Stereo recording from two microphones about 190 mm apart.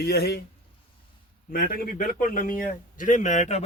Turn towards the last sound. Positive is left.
turn(degrees=35)  # may be behind; listen again after turning